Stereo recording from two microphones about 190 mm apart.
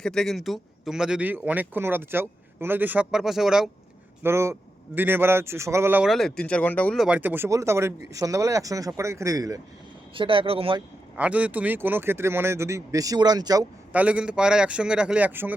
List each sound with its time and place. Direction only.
0.0 s speech: 5° left (ahead or behind)
4.2 s speech: 15° right (ahead or behind); by 10.8 s 30° right (ahead or behind)
11.2 s speech: 5° right (ahead or behind)
13.9 s speech: 5° right (ahead or behind)